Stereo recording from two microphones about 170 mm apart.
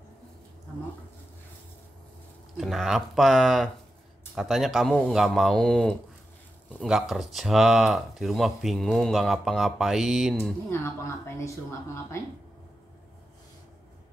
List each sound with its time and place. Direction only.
2.5 s speech: centre (ahead or behind)
10.7 s speech: 15° left (ahead or behind)